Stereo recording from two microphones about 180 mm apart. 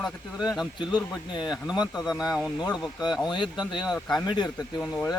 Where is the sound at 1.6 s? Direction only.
5° right (ahead or behind).